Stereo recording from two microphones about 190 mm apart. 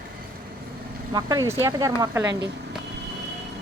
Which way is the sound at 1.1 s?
20° right (ahead or behind).